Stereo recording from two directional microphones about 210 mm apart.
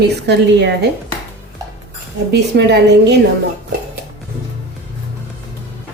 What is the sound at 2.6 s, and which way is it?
Speech, 55° right (ahead or behind).